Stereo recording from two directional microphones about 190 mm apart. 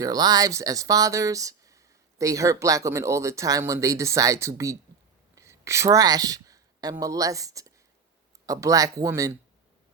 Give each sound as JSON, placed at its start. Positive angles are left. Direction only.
{"t": 0.0, "sound": "speech", "side_deg": -20}